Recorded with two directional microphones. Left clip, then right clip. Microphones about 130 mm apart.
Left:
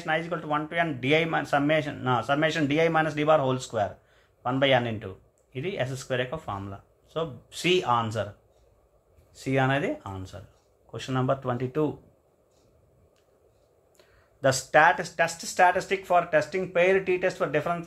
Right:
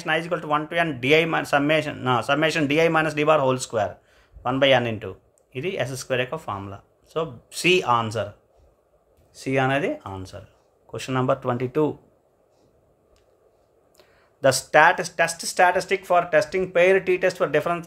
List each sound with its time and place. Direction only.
0.0 s speech: 45° right (ahead or behind)
9.3 s speech: 25° right (ahead or behind); by 11.9 s 40° right (ahead or behind)
13.9 s speech: 35° right (ahead or behind)